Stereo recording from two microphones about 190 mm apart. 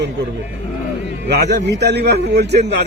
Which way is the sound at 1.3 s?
60° right (ahead or behind).